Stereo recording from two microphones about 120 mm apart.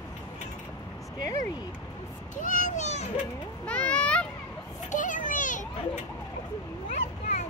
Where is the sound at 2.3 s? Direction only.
90° left; by 3.1 s 70° left (ahead or behind).